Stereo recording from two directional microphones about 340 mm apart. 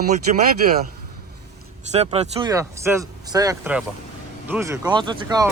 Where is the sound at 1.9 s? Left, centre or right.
Centre.